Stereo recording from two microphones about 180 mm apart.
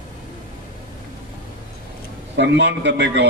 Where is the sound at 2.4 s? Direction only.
75° right (ahead or behind).